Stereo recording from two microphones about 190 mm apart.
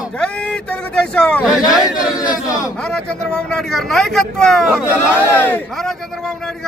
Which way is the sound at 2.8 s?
5° left (ahead or behind).